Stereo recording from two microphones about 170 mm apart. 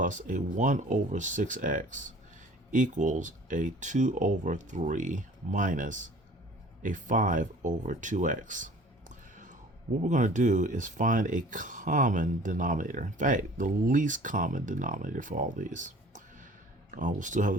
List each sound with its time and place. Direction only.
0.0 s speech: 50° right (ahead or behind)